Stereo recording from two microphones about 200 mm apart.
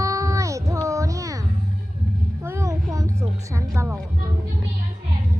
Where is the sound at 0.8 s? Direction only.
15° right (ahead or behind).